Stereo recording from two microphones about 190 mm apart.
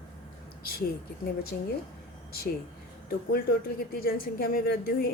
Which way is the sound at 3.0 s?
55° left (ahead or behind).